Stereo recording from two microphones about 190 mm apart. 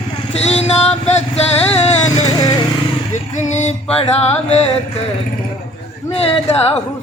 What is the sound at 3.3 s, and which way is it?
Music, 40° left (ahead or behind).